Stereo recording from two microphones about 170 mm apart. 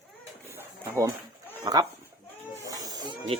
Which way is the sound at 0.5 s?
20° right (ahead or behind).